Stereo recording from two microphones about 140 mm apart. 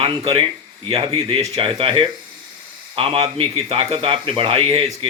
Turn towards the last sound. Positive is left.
turn(degrees=-45)  # may be behind; listen again after turning